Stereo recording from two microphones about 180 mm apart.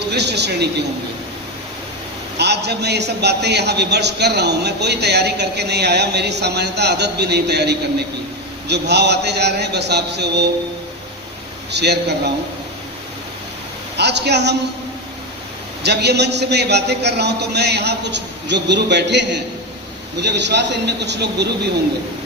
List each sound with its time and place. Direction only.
0.1 s a man's voice: 70° right (ahead or behind)
2.4 s a man's voice: 70° right (ahead or behind)
11.7 s a man's voice: 70° right (ahead or behind)
13.9 s a woman's voice: 70° right (ahead or behind)
15.8 s a man's voice: 65° right (ahead or behind)